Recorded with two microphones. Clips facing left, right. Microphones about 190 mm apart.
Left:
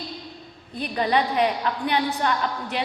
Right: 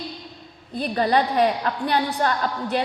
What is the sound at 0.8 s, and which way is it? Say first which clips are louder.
A woman's voice: right 2 dB; 40° right (ahead or behind).